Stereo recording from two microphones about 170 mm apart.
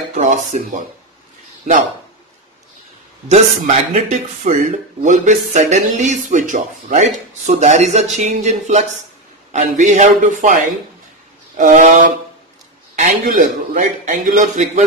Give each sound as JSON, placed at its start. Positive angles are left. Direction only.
{"t": 0.1, "sound": "dishes", "side_deg": -45}
{"t": 3.3, "sound": "speech", "side_deg": -40}